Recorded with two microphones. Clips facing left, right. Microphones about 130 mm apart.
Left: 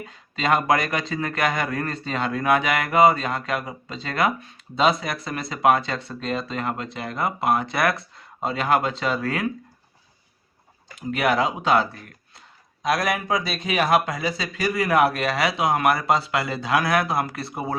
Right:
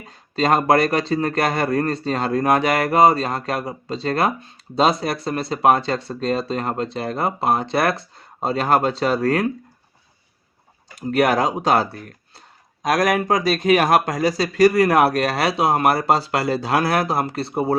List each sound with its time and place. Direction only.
0.0 s speech: 35° right (ahead or behind)
10.9 s speech: 40° right (ahead or behind)